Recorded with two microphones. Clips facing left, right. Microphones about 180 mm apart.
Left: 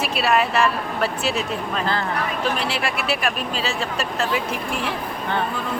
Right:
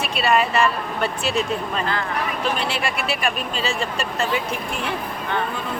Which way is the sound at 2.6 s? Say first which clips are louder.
Even; centre (ahead or behind).